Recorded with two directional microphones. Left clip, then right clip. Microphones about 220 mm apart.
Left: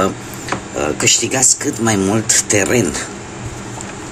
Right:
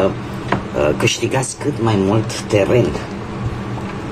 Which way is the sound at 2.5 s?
40° left (ahead or behind).